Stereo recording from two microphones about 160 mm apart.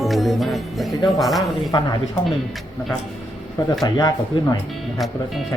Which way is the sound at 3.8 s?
25° left (ahead or behind).